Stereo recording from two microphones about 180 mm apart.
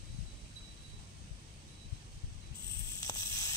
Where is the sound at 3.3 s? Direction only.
20° left (ahead or behind).